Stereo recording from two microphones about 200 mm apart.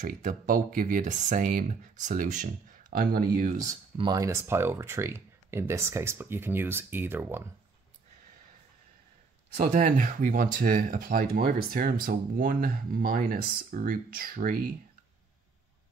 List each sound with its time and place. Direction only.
0.0 s speech: 40° right (ahead or behind)
3.9 s speech: 20° right (ahead or behind)
9.6 s speech: 40° right (ahead or behind)